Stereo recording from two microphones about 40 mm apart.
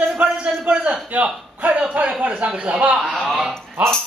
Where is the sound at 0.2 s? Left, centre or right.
Right.